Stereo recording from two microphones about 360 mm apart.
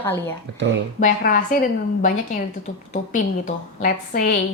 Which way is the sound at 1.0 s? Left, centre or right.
Left.